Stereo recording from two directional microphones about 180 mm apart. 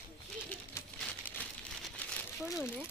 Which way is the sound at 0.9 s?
10° left (ahead or behind).